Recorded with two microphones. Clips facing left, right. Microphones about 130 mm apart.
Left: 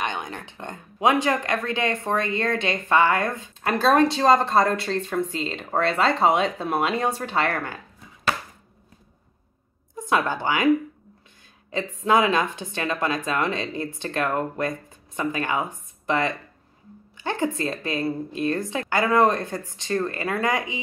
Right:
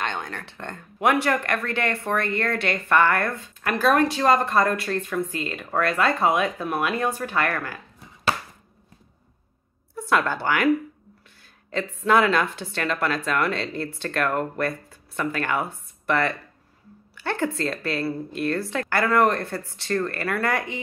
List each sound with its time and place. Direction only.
0.0 s a woman's voice: 15° left (ahead or behind)
3.6 s speech: 25° left (ahead or behind)
9.9 s a woman's voice: 15° left (ahead or behind)
11.7 s a woman's voice: 15° left (ahead or behind)